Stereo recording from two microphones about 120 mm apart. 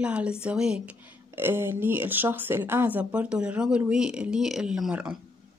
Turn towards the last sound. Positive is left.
turn(degrees=-5)  # may be behind; listen again after turning